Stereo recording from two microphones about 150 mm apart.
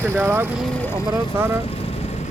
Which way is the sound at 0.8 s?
20° left (ahead or behind).